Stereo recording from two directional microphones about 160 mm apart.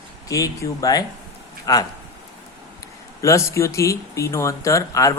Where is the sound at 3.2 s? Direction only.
20° left (ahead or behind).